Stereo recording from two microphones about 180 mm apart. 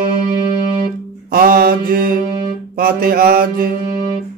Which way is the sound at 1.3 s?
55° right (ahead or behind).